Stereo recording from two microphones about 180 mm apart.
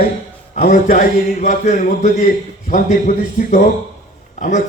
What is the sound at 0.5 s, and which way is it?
A man's voice, 45° left (ahead or behind).